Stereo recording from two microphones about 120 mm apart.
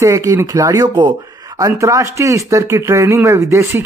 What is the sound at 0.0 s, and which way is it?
Speech, 25° right (ahead or behind).